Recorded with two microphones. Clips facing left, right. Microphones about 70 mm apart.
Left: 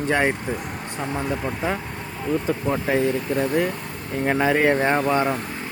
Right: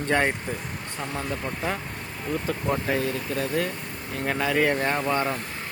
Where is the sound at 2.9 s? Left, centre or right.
Left.